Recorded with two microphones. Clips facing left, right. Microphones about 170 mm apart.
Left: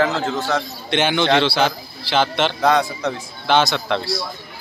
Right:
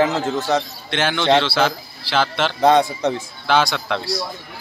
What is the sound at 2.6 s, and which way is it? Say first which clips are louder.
Speech: right 5 dB; 25° right (ahead or behind).